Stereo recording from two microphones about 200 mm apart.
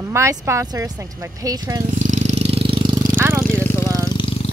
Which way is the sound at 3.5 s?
10° left (ahead or behind).